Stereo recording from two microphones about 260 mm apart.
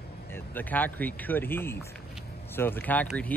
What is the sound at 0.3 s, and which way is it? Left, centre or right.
Speech, centre.